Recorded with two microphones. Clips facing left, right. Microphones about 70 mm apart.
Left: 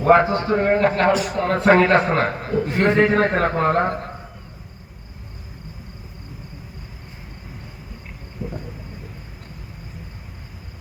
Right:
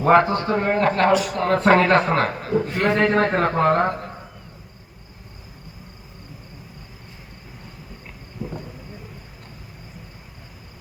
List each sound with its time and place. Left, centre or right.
0.0 s a man's voice: centre
1.0 s a man's voice: left
1.4 s a man's voice: centre; by 3.0 s left
3.0 s a man's voice: centre